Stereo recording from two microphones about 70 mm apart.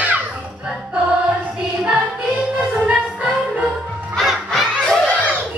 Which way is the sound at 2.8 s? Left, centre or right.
Centre.